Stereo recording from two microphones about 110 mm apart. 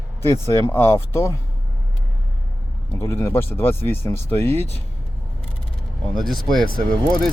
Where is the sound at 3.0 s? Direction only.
20° left (ahead or behind).